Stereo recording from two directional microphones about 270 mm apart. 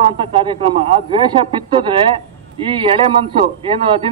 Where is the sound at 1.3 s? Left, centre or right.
Centre.